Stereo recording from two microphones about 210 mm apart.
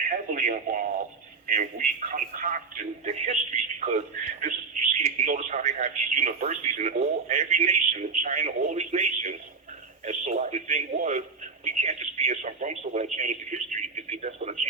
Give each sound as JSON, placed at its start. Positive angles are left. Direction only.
{"t": 0.0, "sound": "a man's voice", "side_deg": -40}